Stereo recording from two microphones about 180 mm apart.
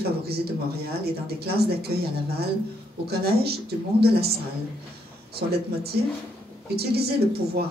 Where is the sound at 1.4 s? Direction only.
60° right (ahead or behind).